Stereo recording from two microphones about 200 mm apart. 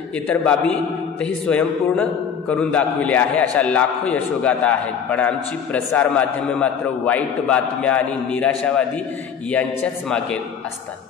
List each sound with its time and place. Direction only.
0.3 s a man's voice: 5° left (ahead or behind)